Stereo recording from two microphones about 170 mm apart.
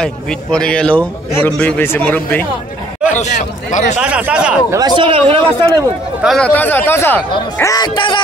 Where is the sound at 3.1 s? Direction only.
45° left (ahead or behind).